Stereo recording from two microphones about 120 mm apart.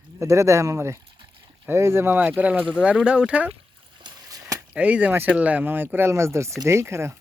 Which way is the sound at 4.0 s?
30° right (ahead or behind).